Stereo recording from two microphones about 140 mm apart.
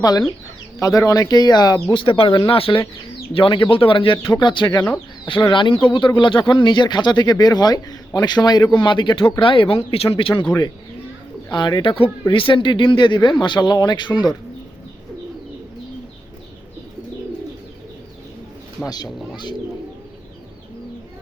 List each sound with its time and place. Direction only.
0.0 s speech: 30° left (ahead or behind)
11.5 s speech: 35° left (ahead or behind)
18.8 s speech: 10° left (ahead or behind)